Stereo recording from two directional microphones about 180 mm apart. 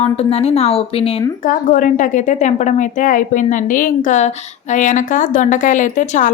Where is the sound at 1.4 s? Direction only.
45° left (ahead or behind).